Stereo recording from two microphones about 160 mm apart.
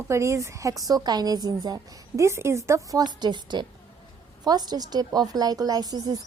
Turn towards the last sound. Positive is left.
turn(degrees=-25)  # may be behind; listen again after turning